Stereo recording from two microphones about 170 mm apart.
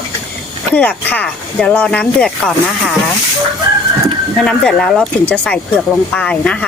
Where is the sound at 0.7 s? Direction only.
10° left (ahead or behind).